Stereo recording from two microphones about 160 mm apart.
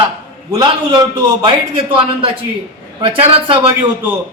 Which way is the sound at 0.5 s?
25° right (ahead or behind).